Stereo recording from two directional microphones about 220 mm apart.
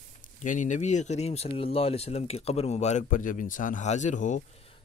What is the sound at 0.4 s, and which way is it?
Speech, 35° left (ahead or behind).